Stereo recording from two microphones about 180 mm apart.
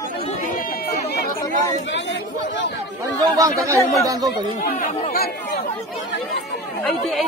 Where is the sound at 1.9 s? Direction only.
90° left.